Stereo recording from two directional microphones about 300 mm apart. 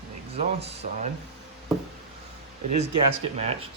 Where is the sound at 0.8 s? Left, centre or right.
Right.